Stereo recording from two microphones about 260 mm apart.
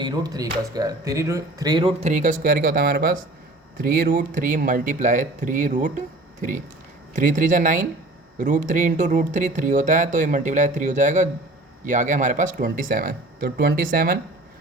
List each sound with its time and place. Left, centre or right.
0.0 s speech: centre
7.1 s speech: right